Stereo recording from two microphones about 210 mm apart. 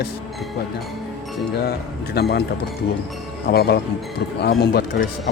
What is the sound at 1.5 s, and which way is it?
Speech, 50° left (ahead or behind).